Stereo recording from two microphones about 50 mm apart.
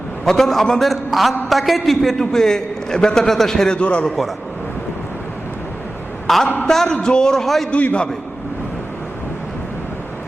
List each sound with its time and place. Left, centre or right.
0.3 s a man's voice: centre
3.8 s a man's voice: left
6.2 s a man's voice: centre
7.7 s a man's voice: left